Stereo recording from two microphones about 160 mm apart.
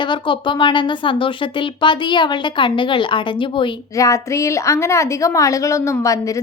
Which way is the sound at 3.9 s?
20° left (ahead or behind).